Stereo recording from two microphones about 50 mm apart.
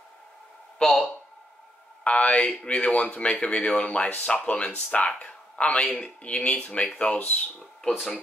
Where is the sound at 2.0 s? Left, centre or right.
Left.